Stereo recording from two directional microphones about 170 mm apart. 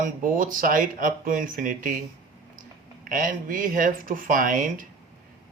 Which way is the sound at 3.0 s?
55° right (ahead or behind).